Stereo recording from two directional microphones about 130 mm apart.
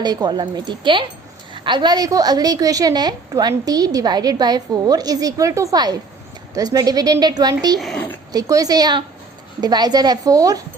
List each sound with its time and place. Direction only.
0.0 s a woman's voice: 30° right (ahead or behind)
7.8 s speech: centre (ahead or behind)
8.3 s a woman's voice: 30° right (ahead or behind)